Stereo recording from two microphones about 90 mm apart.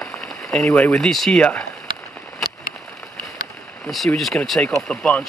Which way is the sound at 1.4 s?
15° left (ahead or behind).